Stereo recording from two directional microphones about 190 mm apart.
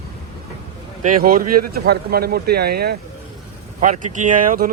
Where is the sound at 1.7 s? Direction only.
55° right (ahead or behind).